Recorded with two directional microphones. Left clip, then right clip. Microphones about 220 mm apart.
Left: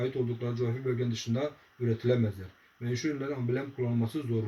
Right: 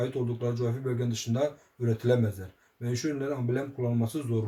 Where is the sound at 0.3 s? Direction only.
20° right (ahead or behind).